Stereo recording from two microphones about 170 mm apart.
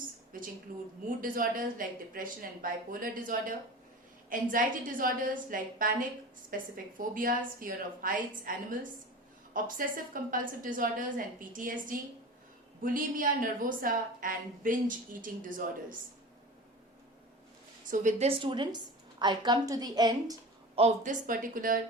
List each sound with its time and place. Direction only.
0.7 s speech: 55° right (ahead or behind)
17.9 s speech: 45° right (ahead or behind)
18.3 s a woman's voice: 30° right (ahead or behind)
20.7 s speech: 40° right (ahead or behind)